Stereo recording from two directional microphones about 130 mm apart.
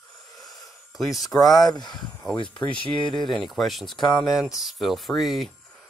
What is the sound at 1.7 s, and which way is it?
Speech, 35° left (ahead or behind).